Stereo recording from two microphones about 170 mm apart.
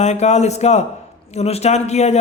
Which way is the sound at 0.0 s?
40° left (ahead or behind).